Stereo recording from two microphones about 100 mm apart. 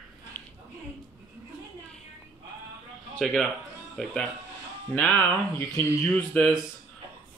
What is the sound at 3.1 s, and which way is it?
A man's voice, 5° left (ahead or behind).